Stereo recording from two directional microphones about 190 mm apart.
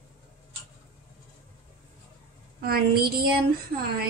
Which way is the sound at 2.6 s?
55° right (ahead or behind).